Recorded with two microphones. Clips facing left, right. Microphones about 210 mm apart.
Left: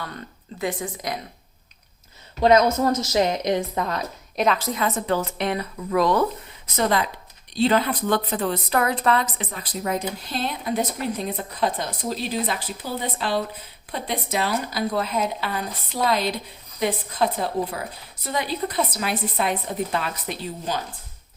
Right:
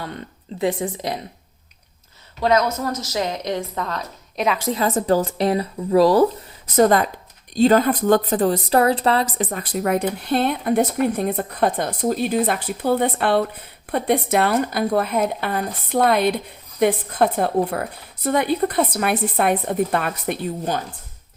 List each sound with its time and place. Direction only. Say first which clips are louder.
0.6 s a woman's voice: right 5 dB; 25° right (ahead or behind)
2.4 s a woman's voice: left 2 dB; 20° left (ahead or behind)
4.4 s a woman's voice: even; 5° right (ahead or behind)
4.7 s speech: right 5 dB; 35° right (ahead or behind)
6.7 s speech: right 7 dB; 45° right (ahead or behind); by 9.2 s 30° right (ahead or behind)
9.4 s speech: right 7 dB; 45° right (ahead or behind)